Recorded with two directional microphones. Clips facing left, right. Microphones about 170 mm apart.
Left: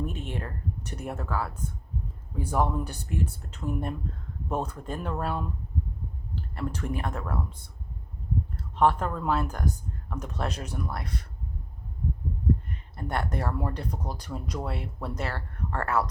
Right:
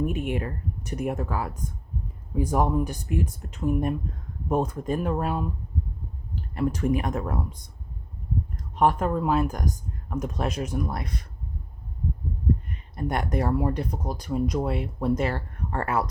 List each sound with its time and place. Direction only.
0.0 s speech: 10° right (ahead or behind)
8.7 s speech: 10° right (ahead or behind)
13.0 s speech: 15° right (ahead or behind)